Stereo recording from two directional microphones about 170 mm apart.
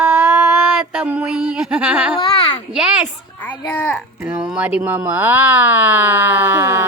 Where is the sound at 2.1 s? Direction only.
25° left (ahead or behind).